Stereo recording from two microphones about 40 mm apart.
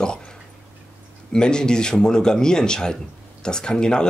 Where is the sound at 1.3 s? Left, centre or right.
Centre.